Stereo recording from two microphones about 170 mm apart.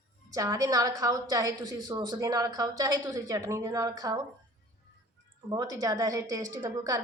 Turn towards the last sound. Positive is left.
turn(degrees=-20)  # may be behind; listen again after turning